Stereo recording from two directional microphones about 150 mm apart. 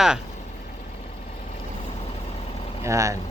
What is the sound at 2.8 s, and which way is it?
Speech, 20° right (ahead or behind).